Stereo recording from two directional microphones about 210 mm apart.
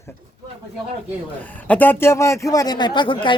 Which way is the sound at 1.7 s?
10° left (ahead or behind).